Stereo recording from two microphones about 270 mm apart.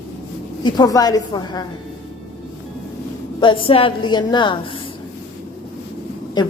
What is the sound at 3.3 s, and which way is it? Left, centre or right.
Speech, centre.